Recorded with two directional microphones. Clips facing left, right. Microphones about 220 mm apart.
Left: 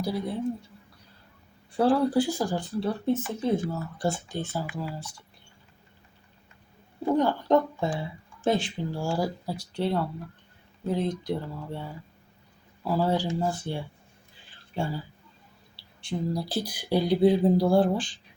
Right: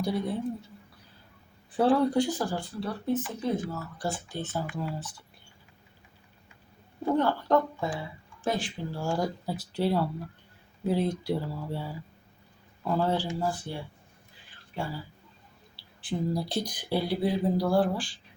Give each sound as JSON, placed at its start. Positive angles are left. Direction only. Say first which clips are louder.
{"t": 0.0, "sound": "speech", "louder": "even", "side_deg": 0}
{"t": 1.7, "sound": "speech", "louder": "left 1 dB", "side_deg": 0}
{"t": 4.4, "sound": "speech", "louder": "left 1 dB", "side_deg": 10}
{"t": 7.0, "sound": "speech", "louder": "left 2 dB", "side_deg": 15}
{"t": 9.0, "sound": "speech", "louder": "even", "side_deg": 10}
{"t": 12.8, "sound": "speech", "louder": "left 2 dB", "side_deg": 5}
{"t": 13.4, "sound": "speech", "louder": "left 2 dB", "side_deg": 25}
{"t": 14.8, "sound": "speech", "louder": "left 4 dB", "side_deg": 25}
{"t": 15.7, "sound": "speech", "louder": "left 1 dB", "side_deg": 0}